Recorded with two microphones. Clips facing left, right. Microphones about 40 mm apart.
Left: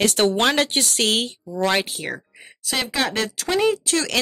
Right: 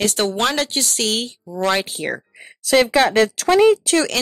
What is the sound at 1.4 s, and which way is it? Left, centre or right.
Speech, centre.